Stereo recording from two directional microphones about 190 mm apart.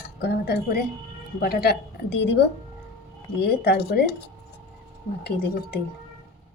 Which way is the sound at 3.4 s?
55° left (ahead or behind).